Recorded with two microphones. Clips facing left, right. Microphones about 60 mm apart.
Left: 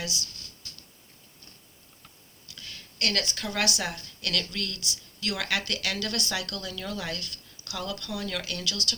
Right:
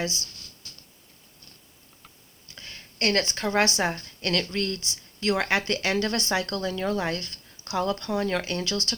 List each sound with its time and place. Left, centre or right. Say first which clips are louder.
0.0 s speech: right 5 dB; right
2.5 s speech: right 1 dB; right